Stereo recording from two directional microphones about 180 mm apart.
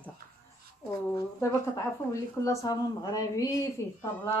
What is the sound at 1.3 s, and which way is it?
A woman's voice, 15° left (ahead or behind).